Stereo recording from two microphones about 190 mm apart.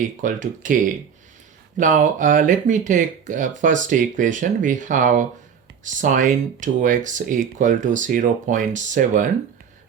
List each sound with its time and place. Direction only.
0.2 s speech: 40° right (ahead or behind)